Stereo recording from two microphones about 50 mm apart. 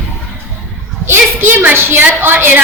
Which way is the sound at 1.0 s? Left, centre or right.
Right.